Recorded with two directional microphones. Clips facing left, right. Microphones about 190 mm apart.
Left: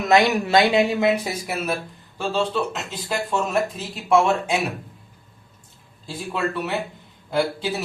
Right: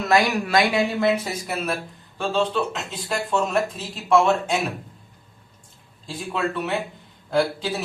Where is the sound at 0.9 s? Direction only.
10° left (ahead or behind).